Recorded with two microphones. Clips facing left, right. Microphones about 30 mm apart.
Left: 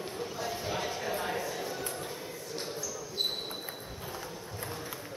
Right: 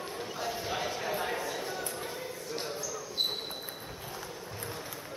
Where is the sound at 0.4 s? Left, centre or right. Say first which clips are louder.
Right 1 dB; centre.